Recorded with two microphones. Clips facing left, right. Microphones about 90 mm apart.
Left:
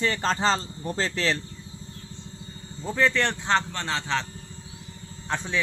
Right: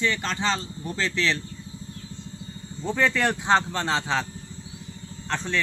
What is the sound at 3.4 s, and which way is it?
Speech, 15° right (ahead or behind).